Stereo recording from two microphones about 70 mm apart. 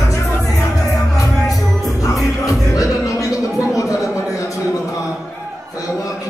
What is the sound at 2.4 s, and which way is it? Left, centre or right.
Music, left.